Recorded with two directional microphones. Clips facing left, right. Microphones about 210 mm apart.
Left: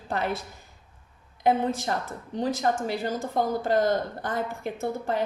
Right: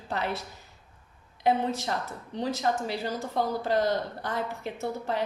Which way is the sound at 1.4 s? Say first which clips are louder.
Left 2 dB; 50° left (ahead or behind).